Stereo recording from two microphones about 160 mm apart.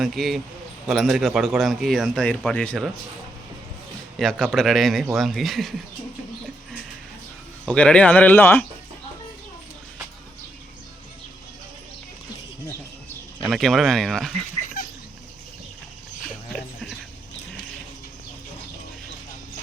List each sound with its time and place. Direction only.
0.0 s speech: centre (ahead or behind)
4.2 s speech: 5° left (ahead or behind)
7.7 s speech: 5° left (ahead or behind)
13.4 s speech: centre (ahead or behind)
14.6 s cat: 55° left (ahead or behind)